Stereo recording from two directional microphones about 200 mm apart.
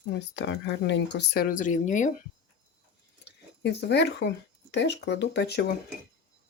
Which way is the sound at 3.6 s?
55° left (ahead or behind).